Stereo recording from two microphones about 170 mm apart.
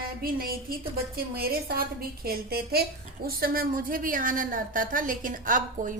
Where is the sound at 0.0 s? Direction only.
60° right (ahead or behind).